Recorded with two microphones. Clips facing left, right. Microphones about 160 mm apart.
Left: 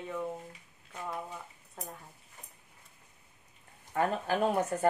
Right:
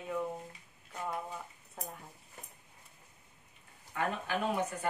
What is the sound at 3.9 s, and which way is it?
Speech, 35° left (ahead or behind).